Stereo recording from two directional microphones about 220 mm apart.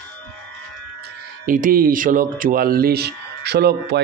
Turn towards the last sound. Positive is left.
turn(degrees=-50)  # may be behind; listen again after turning